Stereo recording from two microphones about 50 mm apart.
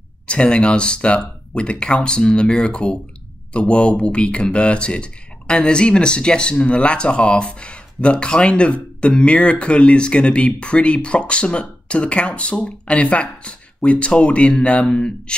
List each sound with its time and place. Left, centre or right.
0.3 s speech: centre